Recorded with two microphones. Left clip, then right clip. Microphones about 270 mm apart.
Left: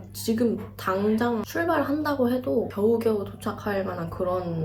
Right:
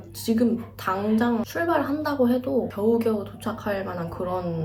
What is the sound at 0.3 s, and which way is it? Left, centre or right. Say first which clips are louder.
A woman's voice: right 1 dB; centre.